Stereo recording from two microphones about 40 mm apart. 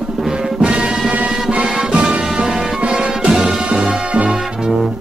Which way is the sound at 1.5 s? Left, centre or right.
Right.